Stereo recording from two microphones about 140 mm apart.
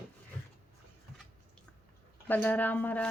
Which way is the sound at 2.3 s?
10° left (ahead or behind).